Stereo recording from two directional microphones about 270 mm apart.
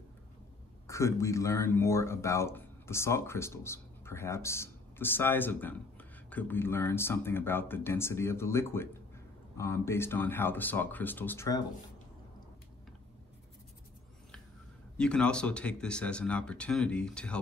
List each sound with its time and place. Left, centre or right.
0.8 s speech: centre
15.0 s speech: centre